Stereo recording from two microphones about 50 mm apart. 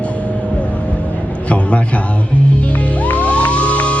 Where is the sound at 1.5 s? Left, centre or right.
Left.